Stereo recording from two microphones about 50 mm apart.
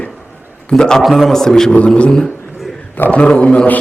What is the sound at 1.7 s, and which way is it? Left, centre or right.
Speech, left.